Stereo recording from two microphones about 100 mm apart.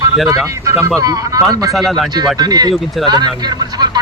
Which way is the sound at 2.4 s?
40° right (ahead or behind).